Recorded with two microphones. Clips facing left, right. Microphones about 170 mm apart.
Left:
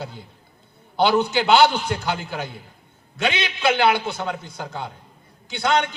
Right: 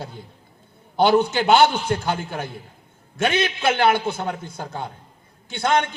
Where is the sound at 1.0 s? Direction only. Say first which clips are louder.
Right 2 dB; 50° right (ahead or behind).